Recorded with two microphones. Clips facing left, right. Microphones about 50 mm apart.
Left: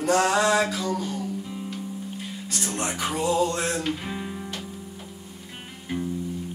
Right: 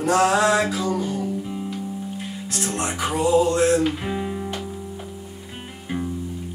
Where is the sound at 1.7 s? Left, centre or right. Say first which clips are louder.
Right 4 dB; centre.